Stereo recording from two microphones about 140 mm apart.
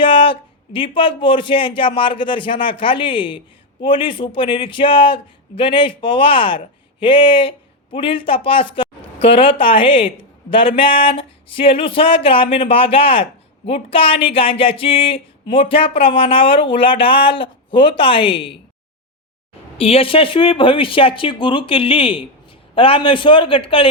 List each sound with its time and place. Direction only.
0.0 s a man's voice: 35° left (ahead or behind)
19.8 s a man's voice: 45° left (ahead or behind)